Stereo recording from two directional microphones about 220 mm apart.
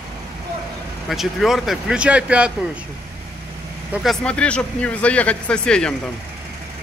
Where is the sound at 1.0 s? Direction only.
Centre (ahead or behind).